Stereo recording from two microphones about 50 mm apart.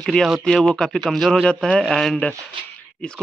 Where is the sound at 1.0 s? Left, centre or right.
Centre.